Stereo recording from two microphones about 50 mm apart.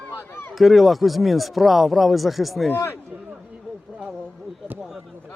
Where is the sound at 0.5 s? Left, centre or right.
Centre.